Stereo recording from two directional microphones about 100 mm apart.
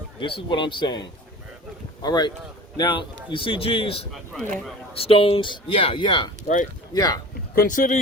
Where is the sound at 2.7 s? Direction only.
55° left (ahead or behind).